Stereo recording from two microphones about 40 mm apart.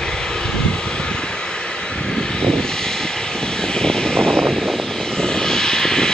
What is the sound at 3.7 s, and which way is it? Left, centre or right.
Vehicle, left.